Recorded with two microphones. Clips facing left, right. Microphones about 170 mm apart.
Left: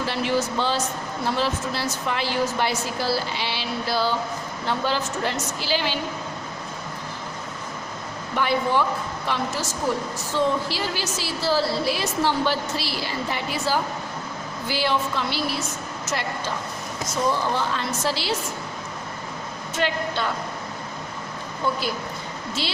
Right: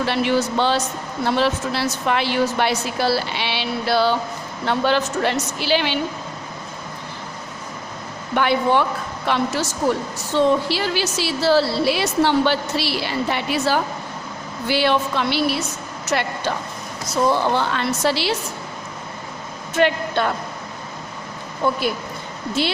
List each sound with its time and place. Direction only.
0.0 s a woman's voice: 70° right (ahead or behind)
8.4 s a woman's voice: 70° right (ahead or behind)
19.7 s a woman's voice: 60° right (ahead or behind)
21.6 s speech: 60° right (ahead or behind)